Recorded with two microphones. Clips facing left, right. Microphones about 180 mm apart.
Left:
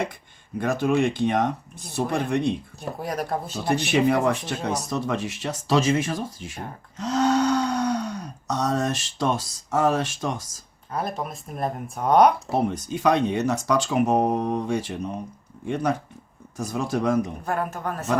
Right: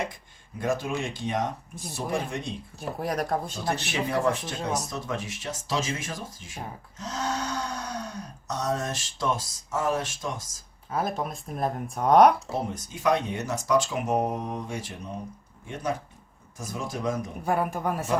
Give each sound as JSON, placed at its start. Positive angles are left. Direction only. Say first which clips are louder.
{"t": 0.6, "sound": "speech", "louder": "left 7 dB", "side_deg": 65}
{"t": 3.0, "sound": "speech", "louder": "even", "side_deg": 0}
{"t": 4.1, "sound": "speech", "louder": "left 4 dB", "side_deg": 65}
{"t": 6.9, "sound": "cattle", "louder": "left 11 dB", "side_deg": 65}
{"t": 10.9, "sound": "speech", "louder": "even", "side_deg": 0}
{"t": 12.5, "sound": "speech", "louder": "left 7 dB", "side_deg": 65}
{"t": 17.4, "sound": "speech", "louder": "right 1 dB", "side_deg": -10}